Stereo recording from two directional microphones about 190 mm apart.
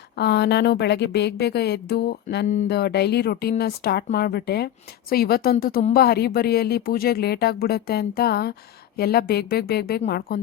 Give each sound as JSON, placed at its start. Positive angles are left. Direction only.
{"t": 0.2, "sound": "a woman's voice", "side_deg": 60}